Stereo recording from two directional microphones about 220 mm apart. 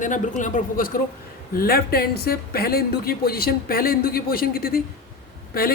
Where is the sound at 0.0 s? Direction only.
35° left (ahead or behind).